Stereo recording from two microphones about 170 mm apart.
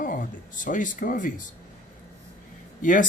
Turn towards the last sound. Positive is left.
turn(degrees=50)  # may be behind; listen again after turning